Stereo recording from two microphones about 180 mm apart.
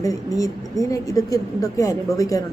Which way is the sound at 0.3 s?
20° left (ahead or behind).